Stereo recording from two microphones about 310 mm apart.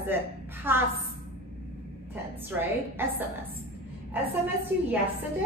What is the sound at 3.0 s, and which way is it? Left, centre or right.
Speech, centre.